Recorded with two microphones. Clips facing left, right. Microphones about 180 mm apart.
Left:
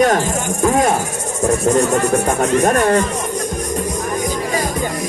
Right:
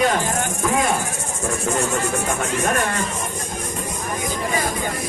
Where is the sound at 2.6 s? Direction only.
40° left (ahead or behind).